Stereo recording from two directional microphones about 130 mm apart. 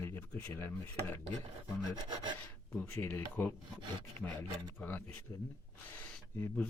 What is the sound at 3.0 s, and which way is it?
Speech, 15° left (ahead or behind).